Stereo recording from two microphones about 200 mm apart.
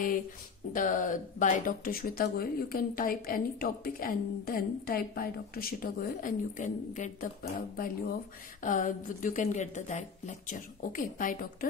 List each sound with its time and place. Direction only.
0.7 s speech: 40° left (ahead or behind)
8.6 s a woman's voice: 40° left (ahead or behind)